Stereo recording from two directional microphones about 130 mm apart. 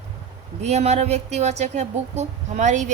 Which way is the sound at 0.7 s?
55° right (ahead or behind).